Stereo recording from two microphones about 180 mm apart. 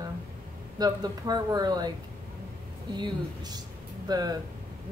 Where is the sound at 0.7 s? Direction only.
20° right (ahead or behind).